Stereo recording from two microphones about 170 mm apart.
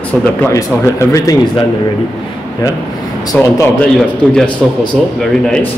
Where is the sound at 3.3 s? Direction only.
10° left (ahead or behind).